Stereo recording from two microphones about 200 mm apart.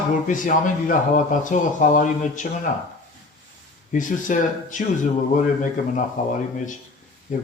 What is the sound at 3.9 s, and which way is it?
Speech, 40° left (ahead or behind).